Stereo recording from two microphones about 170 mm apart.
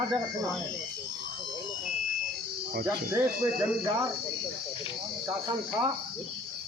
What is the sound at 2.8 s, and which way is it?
Speech, 15° right (ahead or behind).